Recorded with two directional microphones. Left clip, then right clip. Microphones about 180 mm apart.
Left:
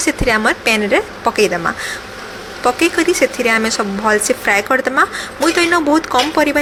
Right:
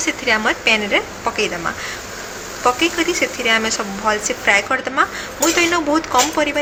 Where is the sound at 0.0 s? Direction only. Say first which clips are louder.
Left 3 dB; 25° left (ahead or behind).